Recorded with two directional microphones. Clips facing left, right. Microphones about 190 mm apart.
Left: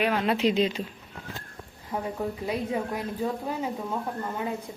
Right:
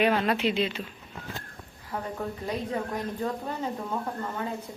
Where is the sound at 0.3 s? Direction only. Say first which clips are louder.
Left 3 dB; 35° left (ahead or behind).